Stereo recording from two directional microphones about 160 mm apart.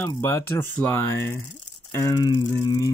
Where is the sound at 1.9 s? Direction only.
20° left (ahead or behind).